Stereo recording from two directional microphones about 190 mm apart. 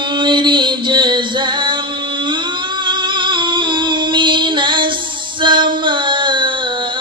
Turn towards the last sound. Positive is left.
turn(degrees=-25)  # may be behind; listen again after turning